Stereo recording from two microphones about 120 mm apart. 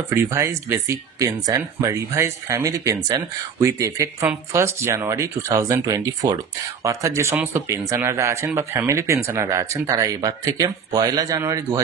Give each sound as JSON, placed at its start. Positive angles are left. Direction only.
{"t": 0.1, "sound": "speech", "side_deg": -20}